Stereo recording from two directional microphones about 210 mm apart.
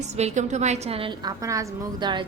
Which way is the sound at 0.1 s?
30° right (ahead or behind).